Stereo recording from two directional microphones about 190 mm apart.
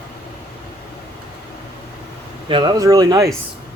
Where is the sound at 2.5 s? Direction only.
25° right (ahead or behind).